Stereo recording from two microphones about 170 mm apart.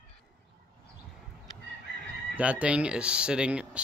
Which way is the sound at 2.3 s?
5° right (ahead or behind).